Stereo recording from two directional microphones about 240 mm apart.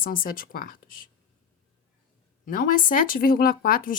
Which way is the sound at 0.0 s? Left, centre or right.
Left.